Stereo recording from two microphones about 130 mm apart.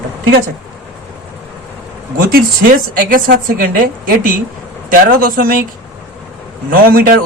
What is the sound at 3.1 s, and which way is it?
A woman's voice, 90° right.